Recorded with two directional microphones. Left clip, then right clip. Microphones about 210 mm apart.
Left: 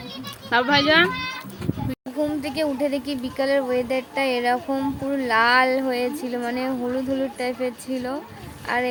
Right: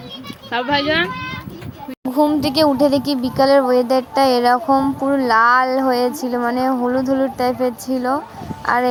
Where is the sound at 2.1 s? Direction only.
25° right (ahead or behind).